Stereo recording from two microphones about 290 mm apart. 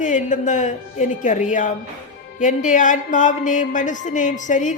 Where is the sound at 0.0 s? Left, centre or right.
Left.